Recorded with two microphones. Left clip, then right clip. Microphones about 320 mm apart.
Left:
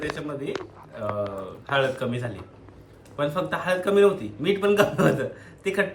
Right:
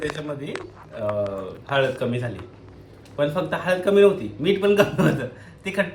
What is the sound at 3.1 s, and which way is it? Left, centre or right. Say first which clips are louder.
A man's voice: right 3 dB; centre.